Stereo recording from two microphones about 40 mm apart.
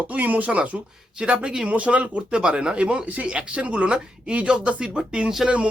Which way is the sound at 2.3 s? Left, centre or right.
Right.